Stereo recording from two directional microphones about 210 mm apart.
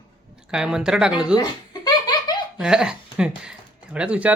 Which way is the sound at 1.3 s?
20° left (ahead or behind).